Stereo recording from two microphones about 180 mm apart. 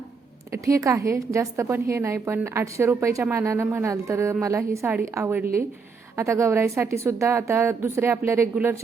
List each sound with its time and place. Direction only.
0.5 s a woman's voice: 15° right (ahead or behind)